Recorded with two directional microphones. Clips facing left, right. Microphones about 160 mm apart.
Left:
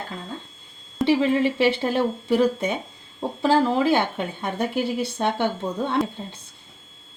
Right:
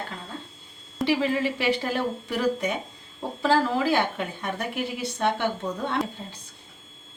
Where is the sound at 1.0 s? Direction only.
25° left (ahead or behind).